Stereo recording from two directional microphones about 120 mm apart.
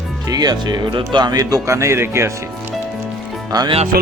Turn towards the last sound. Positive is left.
turn(degrees=-35)  # may be behind; listen again after turning